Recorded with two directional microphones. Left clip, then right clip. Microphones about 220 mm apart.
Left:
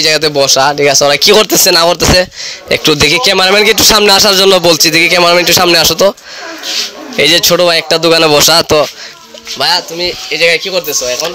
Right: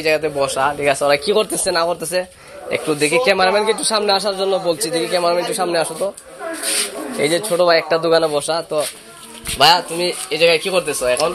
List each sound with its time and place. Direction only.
0.0 s speech: 65° left (ahead or behind)
0.4 s a man's voice: 50° left (ahead or behind)
1.7 s a man's voice: 70° left (ahead or behind)
3.5 s a man's voice: 45° left (ahead or behind)
7.2 s a man's voice: 45° left (ahead or behind)
9.6 s speech: 15° left (ahead or behind)